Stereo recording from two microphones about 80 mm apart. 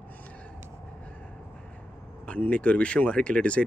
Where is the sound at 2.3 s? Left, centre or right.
Centre.